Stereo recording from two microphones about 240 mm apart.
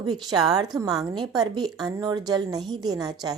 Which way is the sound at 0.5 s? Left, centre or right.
Centre.